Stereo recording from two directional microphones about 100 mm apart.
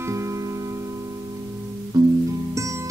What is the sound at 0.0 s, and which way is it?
Music, 30° right (ahead or behind).